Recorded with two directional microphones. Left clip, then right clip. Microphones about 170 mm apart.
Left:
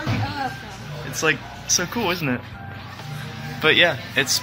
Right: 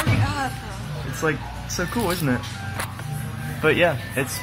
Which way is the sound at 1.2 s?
5° left (ahead or behind).